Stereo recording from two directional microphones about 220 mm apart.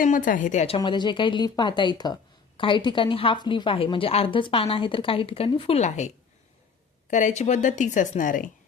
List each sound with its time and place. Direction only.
0.0 s a woman's voice: 35° left (ahead or behind)
0.8 s a woman's voice: 20° left (ahead or behind)
7.1 s a woman's voice: 35° left (ahead or behind)